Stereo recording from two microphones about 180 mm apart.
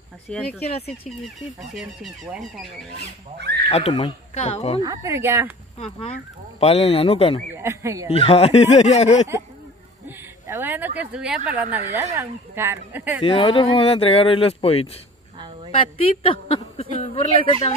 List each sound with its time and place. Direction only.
0.3 s speech: 5° left (ahead or behind)
3.3 s speech: 70° right (ahead or behind)
3.6 s speech: 35° left (ahead or behind)
4.8 s speech: 15° right (ahead or behind)
5.8 s speech: 35° left (ahead or behind)
7.5 s speech: 15° right (ahead or behind)
8.1 s speech: 35° left (ahead or behind)
10.0 s speech: 15° right (ahead or behind)
11.7 s speech: 15° right (ahead or behind)
13.2 s speech: 30° left (ahead or behind)